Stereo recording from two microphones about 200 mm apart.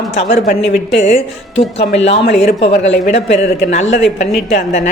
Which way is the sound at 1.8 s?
60° left (ahead or behind).